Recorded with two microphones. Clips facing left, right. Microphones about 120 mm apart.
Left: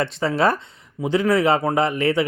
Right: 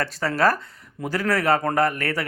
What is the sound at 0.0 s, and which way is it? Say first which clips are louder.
Speech: left 2 dB; 20° left (ahead or behind).